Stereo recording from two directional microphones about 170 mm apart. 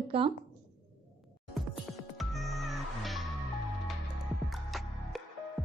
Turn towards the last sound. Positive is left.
turn(degrees=0)  # may be behind; listen again after turning